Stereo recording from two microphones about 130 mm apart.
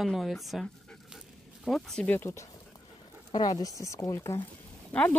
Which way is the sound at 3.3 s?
30° left (ahead or behind).